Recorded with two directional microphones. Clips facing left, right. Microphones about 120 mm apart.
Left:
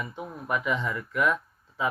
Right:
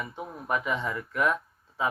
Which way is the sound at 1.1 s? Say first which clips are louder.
Left 1 dB; 30° right (ahead or behind).